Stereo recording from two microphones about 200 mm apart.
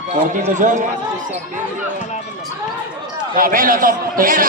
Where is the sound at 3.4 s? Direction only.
45° right (ahead or behind).